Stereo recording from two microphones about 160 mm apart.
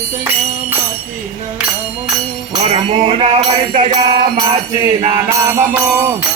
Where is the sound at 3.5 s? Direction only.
30° right (ahead or behind).